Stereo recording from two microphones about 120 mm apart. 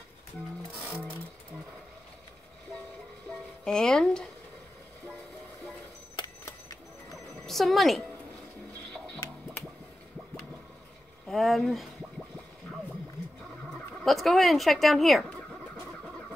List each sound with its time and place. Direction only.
0.8 s music: 15° right (ahead or behind)
3.3 s music: 5° left (ahead or behind)
7.4 s speech: centre (ahead or behind)
11.2 s speech: centre (ahead or behind)
14.0 s speech: centre (ahead or behind)